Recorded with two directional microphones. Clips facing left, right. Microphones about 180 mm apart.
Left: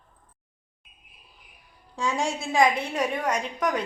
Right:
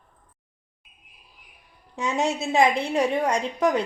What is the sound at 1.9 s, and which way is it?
A woman's voice, 20° right (ahead or behind).